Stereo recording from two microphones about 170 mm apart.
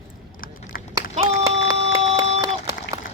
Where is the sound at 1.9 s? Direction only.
35° right (ahead or behind).